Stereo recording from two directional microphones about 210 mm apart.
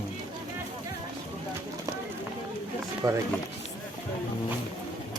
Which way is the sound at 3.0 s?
15° right (ahead or behind).